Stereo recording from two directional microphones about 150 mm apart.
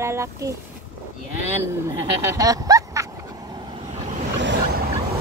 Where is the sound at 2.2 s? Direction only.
25° right (ahead or behind).